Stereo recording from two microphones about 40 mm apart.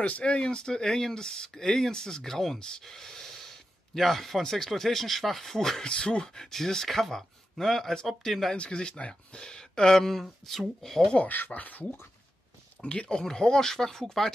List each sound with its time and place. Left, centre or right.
0.2 s speech: left
2.8 s gasp: centre
4.6 s speech: centre
5.9 s speech: left; by 8.5 s centre
8.5 s speech: left
9.4 s speech: centre
10.8 s speech: centre
11.2 s speech: left
12.8 s speech: left